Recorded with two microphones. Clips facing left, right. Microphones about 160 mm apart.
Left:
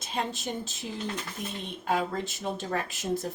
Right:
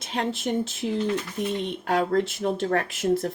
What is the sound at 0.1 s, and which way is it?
Speech, 70° right (ahead or behind).